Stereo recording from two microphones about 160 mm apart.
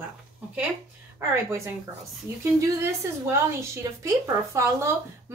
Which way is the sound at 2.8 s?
15° right (ahead or behind).